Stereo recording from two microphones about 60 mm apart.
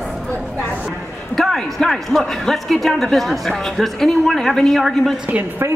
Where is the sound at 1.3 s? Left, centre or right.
Centre.